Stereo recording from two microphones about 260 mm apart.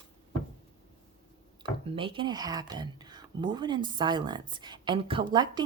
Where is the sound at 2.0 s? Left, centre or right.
Centre.